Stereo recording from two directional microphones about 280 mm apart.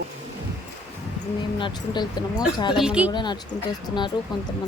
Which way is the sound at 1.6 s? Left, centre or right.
Centre.